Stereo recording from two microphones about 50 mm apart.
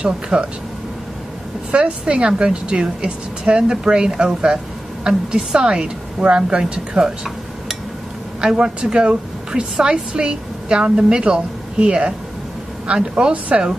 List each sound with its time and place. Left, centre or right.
0.0 s a woman's voice: centre
1.7 s a woman's voice: right
8.4 s a woman's voice: centre